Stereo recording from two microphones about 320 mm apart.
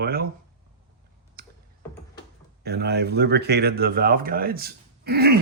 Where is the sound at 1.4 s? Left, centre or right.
Right.